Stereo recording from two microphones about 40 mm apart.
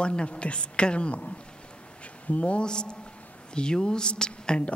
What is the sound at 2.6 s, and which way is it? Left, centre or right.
A woman's voice, left.